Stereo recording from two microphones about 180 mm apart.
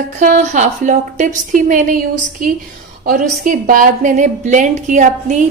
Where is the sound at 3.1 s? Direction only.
50° right (ahead or behind).